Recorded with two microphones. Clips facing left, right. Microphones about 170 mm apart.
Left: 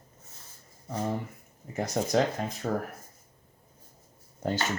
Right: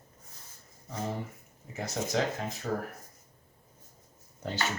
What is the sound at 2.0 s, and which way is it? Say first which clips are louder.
Speech: left 4 dB; 50° left (ahead or behind).